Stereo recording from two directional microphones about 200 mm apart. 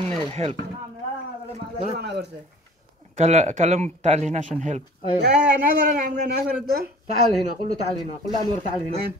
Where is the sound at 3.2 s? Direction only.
35° right (ahead or behind).